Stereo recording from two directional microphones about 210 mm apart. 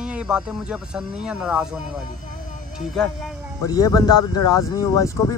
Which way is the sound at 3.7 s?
15° left (ahead or behind).